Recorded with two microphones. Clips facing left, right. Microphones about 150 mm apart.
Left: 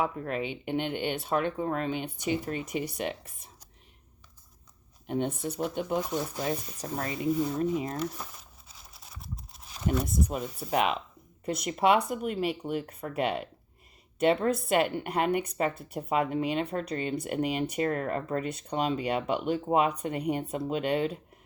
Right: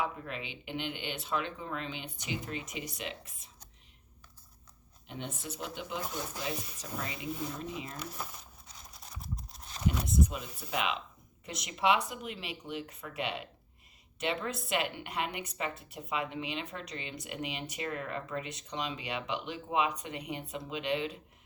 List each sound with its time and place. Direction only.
0.0 s speech: 50° left (ahead or behind)
5.0 s speech: 50° left (ahead or behind)
8.2 s crumpling: 5° left (ahead or behind)
10.2 s speech: 40° left (ahead or behind)